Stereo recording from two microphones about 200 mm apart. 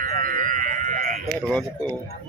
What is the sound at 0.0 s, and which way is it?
Sheep, 45° right (ahead or behind).